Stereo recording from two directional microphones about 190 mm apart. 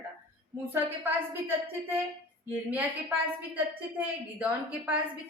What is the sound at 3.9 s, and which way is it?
A woman's voice, 10° right (ahead or behind).